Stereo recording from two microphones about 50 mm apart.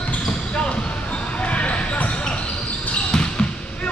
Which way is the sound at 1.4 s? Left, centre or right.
Left.